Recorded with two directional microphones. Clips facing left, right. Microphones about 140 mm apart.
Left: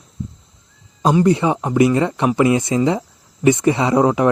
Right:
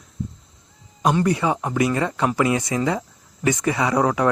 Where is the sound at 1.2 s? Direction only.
25° left (ahead or behind).